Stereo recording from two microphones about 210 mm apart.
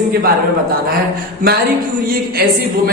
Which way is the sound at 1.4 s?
40° right (ahead or behind).